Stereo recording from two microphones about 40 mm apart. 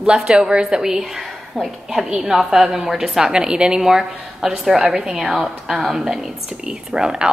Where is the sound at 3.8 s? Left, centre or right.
Centre.